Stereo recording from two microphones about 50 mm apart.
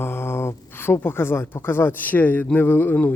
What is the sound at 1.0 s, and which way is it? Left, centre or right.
Speech, left.